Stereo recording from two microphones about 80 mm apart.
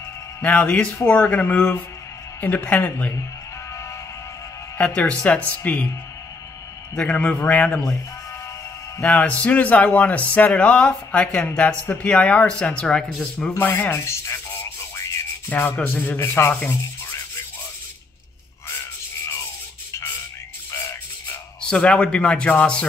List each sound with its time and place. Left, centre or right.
0.4 s speech: centre
4.7 s speech: centre
7.0 s speech: centre
9.0 s speech: centre
13.6 s speech: left
15.5 s speech: left
21.5 s speech: centre